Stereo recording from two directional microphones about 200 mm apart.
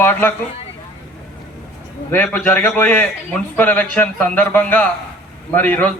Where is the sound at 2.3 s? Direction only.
10° left (ahead or behind).